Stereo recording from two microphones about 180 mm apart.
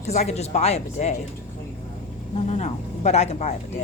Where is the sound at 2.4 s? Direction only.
40° left (ahead or behind).